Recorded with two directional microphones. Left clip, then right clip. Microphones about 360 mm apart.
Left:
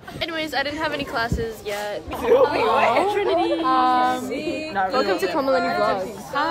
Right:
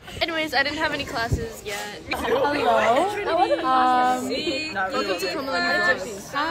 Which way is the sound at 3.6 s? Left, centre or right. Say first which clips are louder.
Left 3 dB; centre.